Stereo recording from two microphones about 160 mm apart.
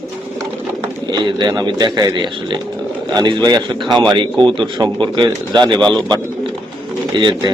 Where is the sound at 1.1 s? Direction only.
30° right (ahead or behind).